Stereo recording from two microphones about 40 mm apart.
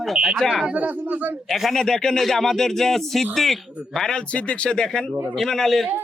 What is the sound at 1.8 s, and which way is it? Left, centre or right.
A man's voice, centre.